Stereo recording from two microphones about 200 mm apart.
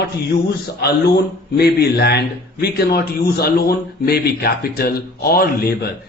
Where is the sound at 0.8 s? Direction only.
55° left (ahead or behind).